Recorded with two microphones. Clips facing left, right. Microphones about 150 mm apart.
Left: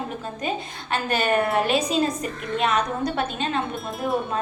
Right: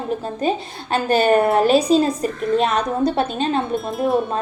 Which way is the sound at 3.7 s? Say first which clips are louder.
Right 7 dB; centre (ahead or behind).